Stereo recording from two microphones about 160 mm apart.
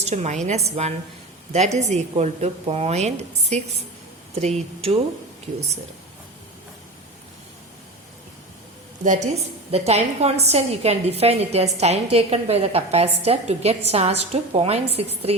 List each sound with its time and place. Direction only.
0.0 s a woman's voice: 45° right (ahead or behind)
9.7 s a woman's voice: 40° right (ahead or behind)